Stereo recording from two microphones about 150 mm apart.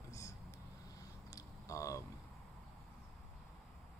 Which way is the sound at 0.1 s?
20° left (ahead or behind).